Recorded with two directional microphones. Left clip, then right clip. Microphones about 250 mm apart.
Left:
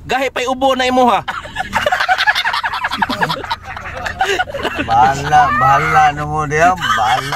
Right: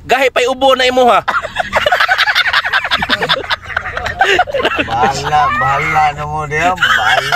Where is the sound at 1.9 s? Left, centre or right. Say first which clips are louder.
Right 1 dB; centre.